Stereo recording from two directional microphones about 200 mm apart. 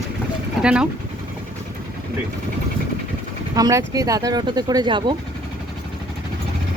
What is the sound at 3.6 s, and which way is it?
Speech, 15° right (ahead or behind).